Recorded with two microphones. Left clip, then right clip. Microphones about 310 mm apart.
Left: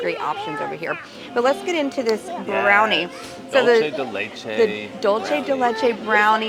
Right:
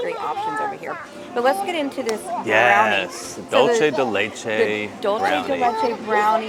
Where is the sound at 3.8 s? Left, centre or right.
Right.